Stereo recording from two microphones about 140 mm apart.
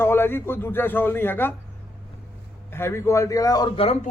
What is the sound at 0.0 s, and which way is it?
A man's voice, 15° left (ahead or behind).